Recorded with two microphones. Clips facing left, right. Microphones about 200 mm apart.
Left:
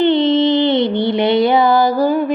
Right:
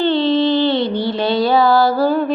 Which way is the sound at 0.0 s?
20° left (ahead or behind).